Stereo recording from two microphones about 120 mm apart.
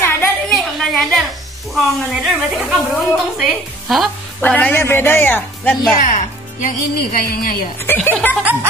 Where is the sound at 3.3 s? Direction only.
Centre (ahead or behind).